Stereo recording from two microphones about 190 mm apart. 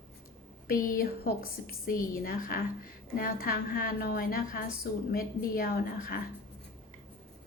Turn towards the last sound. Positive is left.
turn(degrees=50)  # may be behind; listen again after turning